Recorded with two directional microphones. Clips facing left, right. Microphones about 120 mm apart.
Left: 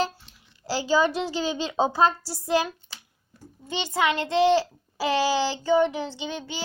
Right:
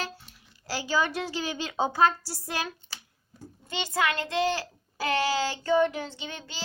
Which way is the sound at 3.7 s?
20° left (ahead or behind).